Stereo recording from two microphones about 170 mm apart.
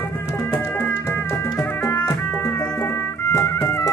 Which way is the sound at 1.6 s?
15° left (ahead or behind).